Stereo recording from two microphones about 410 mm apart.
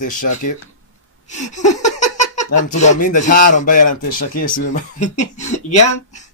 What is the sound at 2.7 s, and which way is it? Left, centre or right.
Speech, centre.